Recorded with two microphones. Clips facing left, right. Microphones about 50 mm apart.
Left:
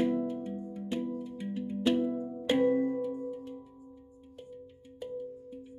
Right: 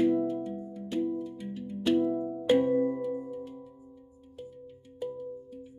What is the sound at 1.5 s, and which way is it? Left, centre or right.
Music, centre.